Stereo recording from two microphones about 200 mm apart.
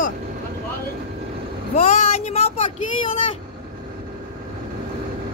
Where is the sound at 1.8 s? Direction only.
35° left (ahead or behind).